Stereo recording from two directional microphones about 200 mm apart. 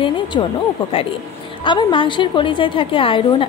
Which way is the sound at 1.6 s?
25° left (ahead or behind).